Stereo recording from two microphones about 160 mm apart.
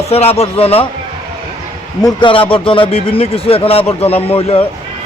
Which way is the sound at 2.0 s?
30° left (ahead or behind).